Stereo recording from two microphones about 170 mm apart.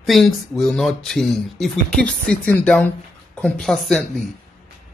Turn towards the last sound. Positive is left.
turn(degrees=0)  # may be behind; listen again after turning